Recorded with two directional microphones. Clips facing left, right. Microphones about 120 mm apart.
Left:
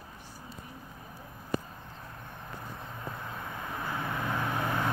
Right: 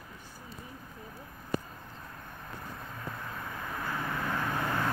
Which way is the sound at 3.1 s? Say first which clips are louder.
Left 1 dB; 20° left (ahead or behind).